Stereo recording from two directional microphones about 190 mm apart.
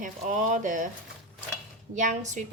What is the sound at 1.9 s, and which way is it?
Speech, 40° right (ahead or behind).